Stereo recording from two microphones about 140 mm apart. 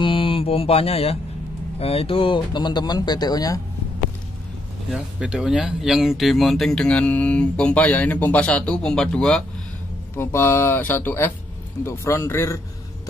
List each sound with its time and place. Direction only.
0.0 s mantra: 40° left (ahead or behind)
1.8 s speech: 45° left (ahead or behind); by 3.6 s 25° left (ahead or behind)
4.9 s speech: 5° right (ahead or behind)
10.1 s speech: 20° left (ahead or behind)